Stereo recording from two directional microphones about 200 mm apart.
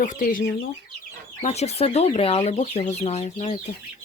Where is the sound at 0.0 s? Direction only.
40° left (ahead or behind).